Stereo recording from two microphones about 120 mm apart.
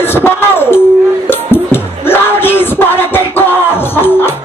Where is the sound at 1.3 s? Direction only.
20° left (ahead or behind).